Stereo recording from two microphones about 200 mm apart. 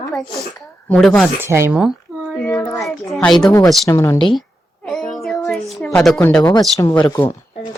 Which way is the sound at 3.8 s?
15° left (ahead or behind).